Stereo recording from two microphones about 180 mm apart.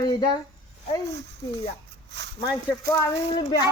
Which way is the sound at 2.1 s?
75° right (ahead or behind).